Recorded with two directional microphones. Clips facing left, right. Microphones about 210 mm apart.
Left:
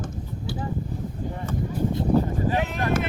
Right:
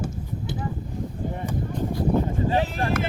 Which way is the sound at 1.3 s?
20° right (ahead or behind).